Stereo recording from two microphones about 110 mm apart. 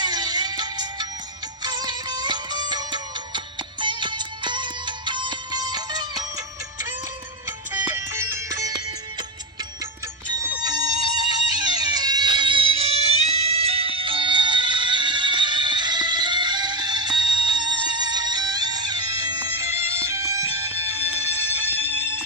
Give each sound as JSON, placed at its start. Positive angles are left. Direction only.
{"t": 0.0, "sound": "music", "side_deg": -40}
{"t": 7.7, "sound": "music", "side_deg": -20}
{"t": 10.6, "sound": "music", "side_deg": -35}